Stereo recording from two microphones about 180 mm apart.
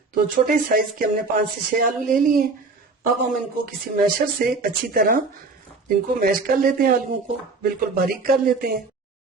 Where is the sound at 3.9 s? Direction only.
50° right (ahead or behind).